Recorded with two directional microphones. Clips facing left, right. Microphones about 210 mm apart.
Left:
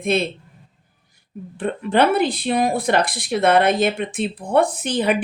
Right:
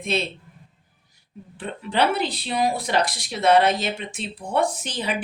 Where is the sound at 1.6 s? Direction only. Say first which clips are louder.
Left 5 dB; 50° left (ahead or behind).